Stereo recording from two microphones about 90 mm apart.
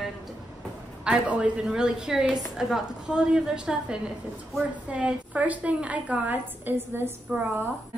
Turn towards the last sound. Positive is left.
turn(degrees=-20)  # may be behind; listen again after turning